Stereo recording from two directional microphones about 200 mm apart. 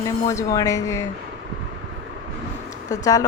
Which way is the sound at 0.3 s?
15° left (ahead or behind).